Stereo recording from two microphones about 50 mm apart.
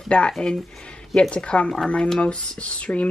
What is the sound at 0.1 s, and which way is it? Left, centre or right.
Speech, left.